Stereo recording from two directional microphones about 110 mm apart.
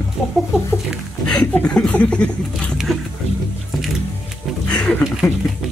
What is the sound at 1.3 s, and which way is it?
Speech, 10° left (ahead or behind).